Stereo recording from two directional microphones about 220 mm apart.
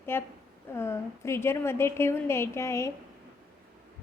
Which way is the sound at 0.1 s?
10° left (ahead or behind).